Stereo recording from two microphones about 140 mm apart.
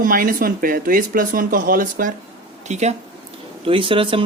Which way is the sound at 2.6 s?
55° right (ahead or behind).